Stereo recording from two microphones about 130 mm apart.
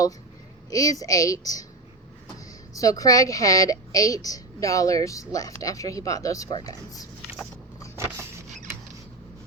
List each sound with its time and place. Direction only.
0.7 s a woman's voice: 25° left (ahead or behind)
2.7 s a woman's voice: 25° left (ahead or behind)
7.9 s vehicle: 20° right (ahead or behind)